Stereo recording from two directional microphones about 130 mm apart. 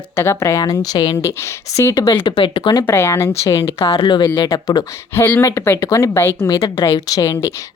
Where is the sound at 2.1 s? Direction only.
35° left (ahead or behind).